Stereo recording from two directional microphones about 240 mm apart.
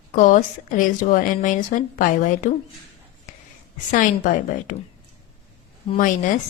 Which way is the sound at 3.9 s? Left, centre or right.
Left.